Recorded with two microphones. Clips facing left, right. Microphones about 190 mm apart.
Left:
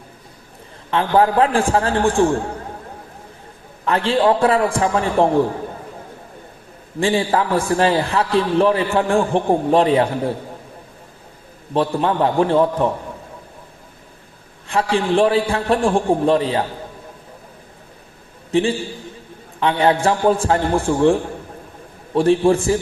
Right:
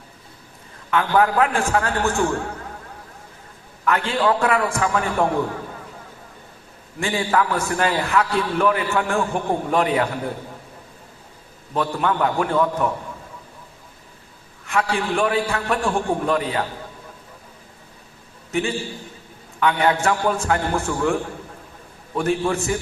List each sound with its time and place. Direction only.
0.9 s a man's voice: 30° left (ahead or behind)
3.8 s a man's voice: 30° left (ahead or behind)
7.0 s a man's voice: 30° left (ahead or behind)
11.7 s a man's voice: 30° left (ahead or behind)
14.7 s a man's voice: 30° left (ahead or behind)
18.5 s a man's voice: 30° left (ahead or behind)